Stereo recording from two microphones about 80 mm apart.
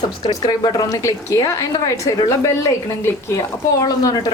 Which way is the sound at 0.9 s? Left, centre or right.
Left.